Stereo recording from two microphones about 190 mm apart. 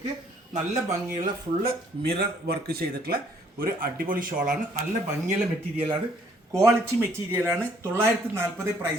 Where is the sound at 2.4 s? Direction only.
55° right (ahead or behind).